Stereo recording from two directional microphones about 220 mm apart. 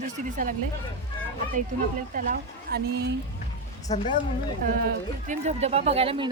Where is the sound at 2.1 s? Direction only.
40° right (ahead or behind).